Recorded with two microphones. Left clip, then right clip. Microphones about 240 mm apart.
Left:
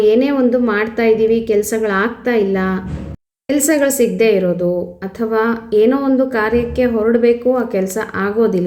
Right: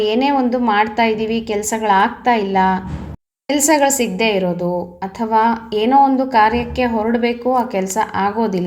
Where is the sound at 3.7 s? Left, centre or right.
Right.